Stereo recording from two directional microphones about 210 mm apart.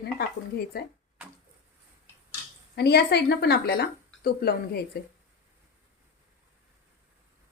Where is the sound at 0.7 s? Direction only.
50° left (ahead or behind).